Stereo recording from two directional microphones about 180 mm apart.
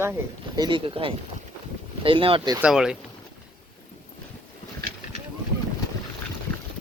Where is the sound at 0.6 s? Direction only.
25° right (ahead or behind).